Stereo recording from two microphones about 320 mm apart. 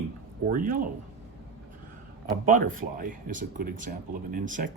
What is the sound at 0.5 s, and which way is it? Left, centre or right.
Speech, right.